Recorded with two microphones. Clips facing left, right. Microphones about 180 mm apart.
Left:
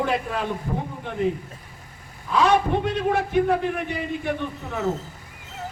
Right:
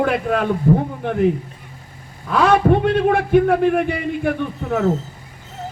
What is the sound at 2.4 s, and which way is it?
A man's voice, 55° right (ahead or behind).